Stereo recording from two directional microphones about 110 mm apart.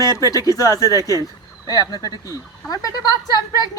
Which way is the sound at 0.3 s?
30° left (ahead or behind).